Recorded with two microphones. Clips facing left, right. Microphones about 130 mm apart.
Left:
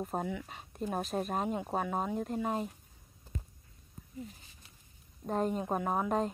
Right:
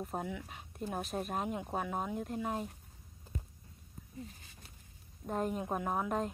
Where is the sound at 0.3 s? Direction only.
Centre (ahead or behind).